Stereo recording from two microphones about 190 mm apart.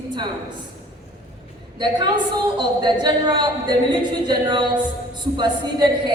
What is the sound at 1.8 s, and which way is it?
A woman's voice, 25° right (ahead or behind).